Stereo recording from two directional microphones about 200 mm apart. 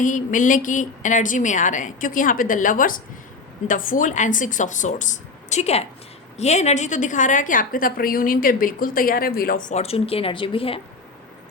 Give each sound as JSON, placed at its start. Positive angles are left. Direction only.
{"t": 0.0, "sound": "a woman's voice", "side_deg": 40}